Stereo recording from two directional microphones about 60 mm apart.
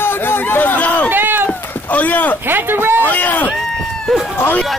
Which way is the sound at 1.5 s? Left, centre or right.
Left.